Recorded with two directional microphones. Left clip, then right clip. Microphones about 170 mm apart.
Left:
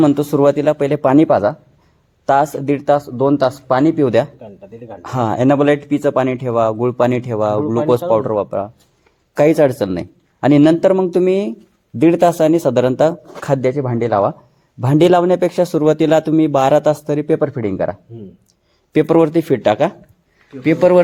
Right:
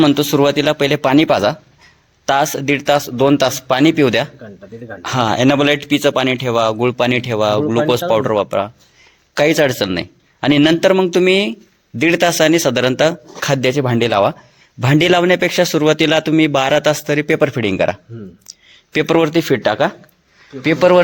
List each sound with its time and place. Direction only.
0.0 s a man's voice: 10° left (ahead or behind)
3.4 s speech: 25° right (ahead or behind)
3.9 s a man's voice: 5° left (ahead or behind)
13.5 s a man's voice: 5° right (ahead or behind)
13.7 s speech: 20° right (ahead or behind)
14.8 s speech: 5° left (ahead or behind)
17.4 s speech: 25° right (ahead or behind)
18.7 s speech: 15° left (ahead or behind)